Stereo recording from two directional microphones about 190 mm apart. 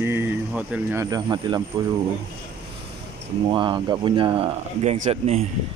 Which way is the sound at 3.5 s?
25° right (ahead or behind).